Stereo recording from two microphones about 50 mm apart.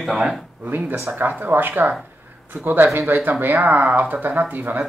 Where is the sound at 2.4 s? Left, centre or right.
Right.